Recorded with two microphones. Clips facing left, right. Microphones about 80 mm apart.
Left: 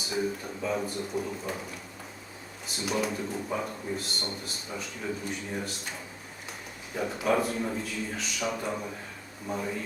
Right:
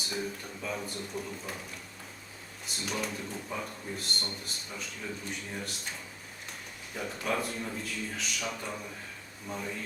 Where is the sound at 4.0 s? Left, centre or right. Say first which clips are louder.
Left 2 dB; centre.